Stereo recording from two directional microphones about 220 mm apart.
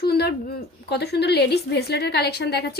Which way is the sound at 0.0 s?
45° left (ahead or behind).